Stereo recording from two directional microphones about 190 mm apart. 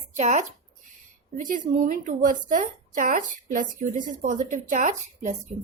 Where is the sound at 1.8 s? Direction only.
45° right (ahead or behind).